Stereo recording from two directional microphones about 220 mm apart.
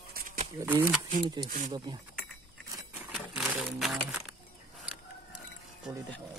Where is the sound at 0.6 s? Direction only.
10° right (ahead or behind).